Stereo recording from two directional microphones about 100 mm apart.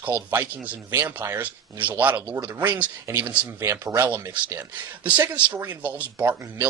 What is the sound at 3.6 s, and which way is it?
Speech, 25° right (ahead or behind).